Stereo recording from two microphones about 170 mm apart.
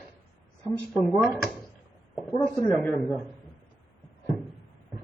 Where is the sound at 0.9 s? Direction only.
Centre (ahead or behind).